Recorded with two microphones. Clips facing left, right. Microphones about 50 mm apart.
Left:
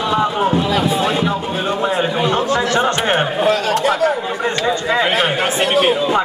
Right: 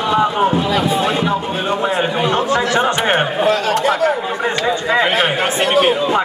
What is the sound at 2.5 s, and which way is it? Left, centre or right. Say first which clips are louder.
Chatter: right 1 dB; centre.